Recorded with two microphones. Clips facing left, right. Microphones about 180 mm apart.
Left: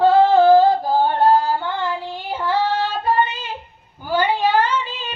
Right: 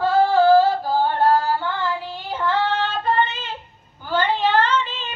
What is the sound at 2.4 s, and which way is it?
Child singing, 10° left (ahead or behind).